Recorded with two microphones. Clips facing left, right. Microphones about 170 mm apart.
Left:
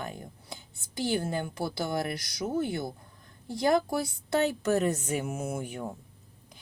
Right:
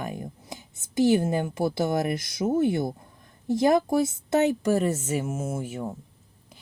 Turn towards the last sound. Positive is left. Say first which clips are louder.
# right 3 dB
turn(degrees=-5)  # may be behind; listen again after turning